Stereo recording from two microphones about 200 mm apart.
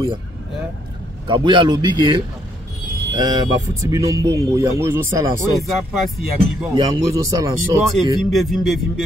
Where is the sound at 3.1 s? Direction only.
20° right (ahead or behind).